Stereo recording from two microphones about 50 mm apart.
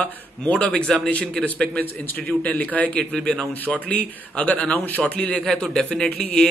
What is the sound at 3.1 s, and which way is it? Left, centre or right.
Speech, centre.